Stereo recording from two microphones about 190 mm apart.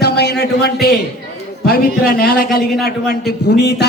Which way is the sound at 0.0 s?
60° left (ahead or behind).